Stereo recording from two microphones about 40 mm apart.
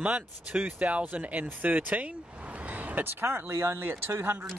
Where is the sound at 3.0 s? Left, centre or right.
Right.